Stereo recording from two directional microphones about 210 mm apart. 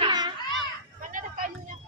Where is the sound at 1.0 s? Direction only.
40° right (ahead or behind).